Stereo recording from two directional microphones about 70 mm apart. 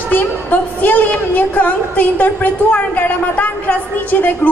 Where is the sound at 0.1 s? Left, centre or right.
Left.